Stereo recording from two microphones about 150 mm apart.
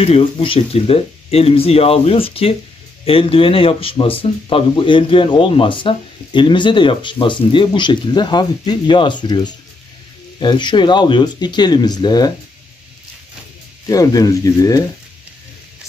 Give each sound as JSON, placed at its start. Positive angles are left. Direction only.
{"t": 0.0, "sound": "speech", "side_deg": 40}
{"t": 13.8, "sound": "speech", "side_deg": 25}